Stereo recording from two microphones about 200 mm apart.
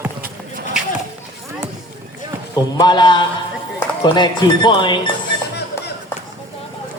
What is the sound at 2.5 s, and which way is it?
Speech, 20° left (ahead or behind).